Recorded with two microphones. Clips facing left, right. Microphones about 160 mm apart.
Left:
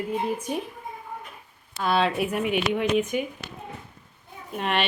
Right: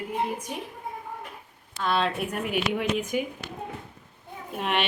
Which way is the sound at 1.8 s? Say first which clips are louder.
Left 3 dB; 5° left (ahead or behind).